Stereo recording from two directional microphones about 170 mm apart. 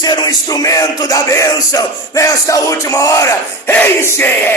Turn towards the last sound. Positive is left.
turn(degrees=10)  # may be behind; listen again after turning